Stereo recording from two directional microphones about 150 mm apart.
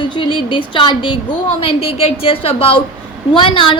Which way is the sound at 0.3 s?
35° left (ahead or behind).